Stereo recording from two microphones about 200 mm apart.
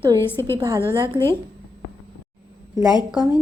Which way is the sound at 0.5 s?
20° right (ahead or behind).